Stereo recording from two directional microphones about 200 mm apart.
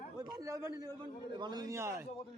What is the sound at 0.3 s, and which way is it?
A man's voice, 15° right (ahead or behind).